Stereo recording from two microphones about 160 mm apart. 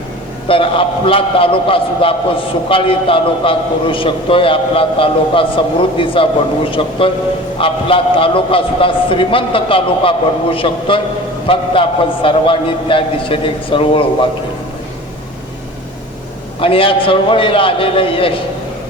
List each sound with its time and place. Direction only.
0.4 s a man's voice: 35° left (ahead or behind)
16.6 s a man's voice: 35° left (ahead or behind)